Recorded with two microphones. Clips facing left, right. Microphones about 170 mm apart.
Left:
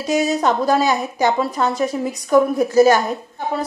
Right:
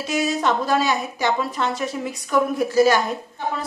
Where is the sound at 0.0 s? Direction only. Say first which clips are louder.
Left 4 dB; 40° left (ahead or behind).